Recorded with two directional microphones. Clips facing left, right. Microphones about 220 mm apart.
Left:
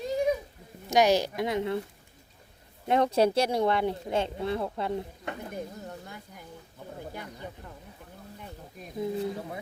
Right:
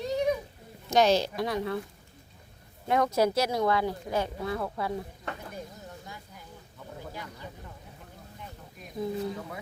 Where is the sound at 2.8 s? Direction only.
25° left (ahead or behind).